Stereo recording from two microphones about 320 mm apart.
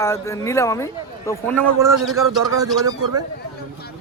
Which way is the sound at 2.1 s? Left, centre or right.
Centre.